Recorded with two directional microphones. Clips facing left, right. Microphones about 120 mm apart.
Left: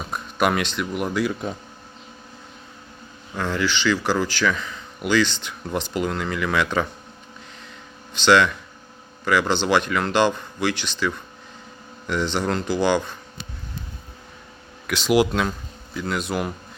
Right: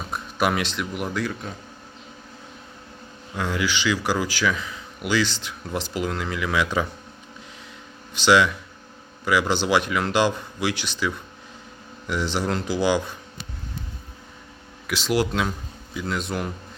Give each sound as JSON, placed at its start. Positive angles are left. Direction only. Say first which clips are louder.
{"t": 0.0, "sound": "speech", "louder": "left 2 dB", "side_deg": 0}
{"t": 1.2, "sound": "speech", "louder": "left 5 dB", "side_deg": 15}
{"t": 3.3, "sound": "a man's voice", "louder": "left 1 dB", "side_deg": -10}
{"t": 8.1, "sound": "a man's voice", "louder": "left 1 dB", "side_deg": -5}
{"t": 14.8, "sound": "a man's voice", "louder": "left 4 dB", "side_deg": 0}